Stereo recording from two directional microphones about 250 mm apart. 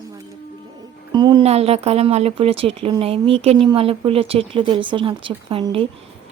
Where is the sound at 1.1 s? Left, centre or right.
Centre.